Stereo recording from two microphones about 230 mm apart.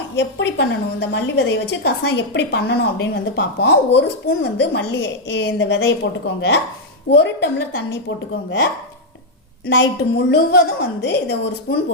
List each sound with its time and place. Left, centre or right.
0.2 s a woman's voice: left
7.1 s a woman's voice: left
9.6 s a woman's voice: left